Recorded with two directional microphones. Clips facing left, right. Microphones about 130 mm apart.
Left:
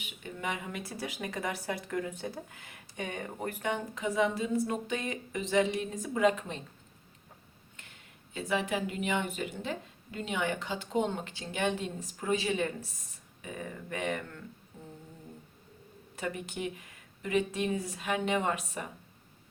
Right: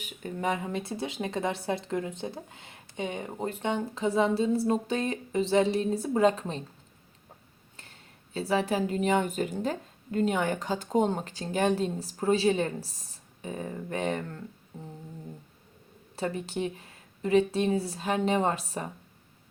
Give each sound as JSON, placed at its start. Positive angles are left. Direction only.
{"t": 0.0, "sound": "speech", "side_deg": -40}
{"t": 7.8, "sound": "speech", "side_deg": -35}
{"t": 16.1, "sound": "speech", "side_deg": -30}